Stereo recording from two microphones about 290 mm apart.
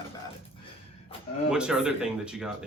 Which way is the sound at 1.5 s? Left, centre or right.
Centre.